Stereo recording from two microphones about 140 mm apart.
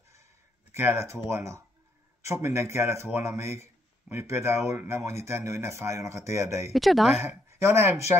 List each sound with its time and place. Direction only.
0.7 s speech: 20° right (ahead or behind)
6.7 s speech: centre (ahead or behind)
7.2 s speech: 20° right (ahead or behind)